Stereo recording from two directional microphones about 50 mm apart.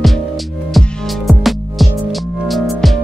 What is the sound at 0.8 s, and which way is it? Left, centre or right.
Music, centre.